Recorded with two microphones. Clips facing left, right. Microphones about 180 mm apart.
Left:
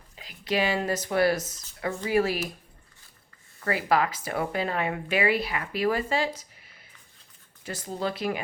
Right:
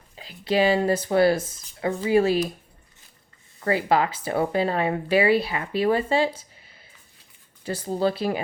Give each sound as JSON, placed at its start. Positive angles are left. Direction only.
{"t": 0.2, "sound": "speech", "side_deg": -30}
{"t": 3.6, "sound": "speech", "side_deg": -25}